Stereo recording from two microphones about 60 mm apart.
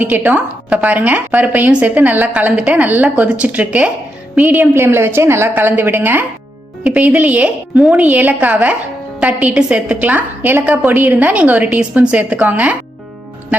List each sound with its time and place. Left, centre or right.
0.0 s a woman's voice: right
4.5 s a woman's voice: right
5.5 s a woman's voice: right
6.8 s a woman's voice: centre